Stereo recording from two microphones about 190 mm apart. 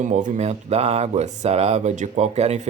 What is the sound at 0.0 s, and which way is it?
Speech, 40° right (ahead or behind).